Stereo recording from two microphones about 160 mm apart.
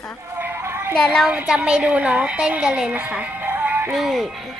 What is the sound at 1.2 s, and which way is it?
A woman's voice, 5° right (ahead or behind).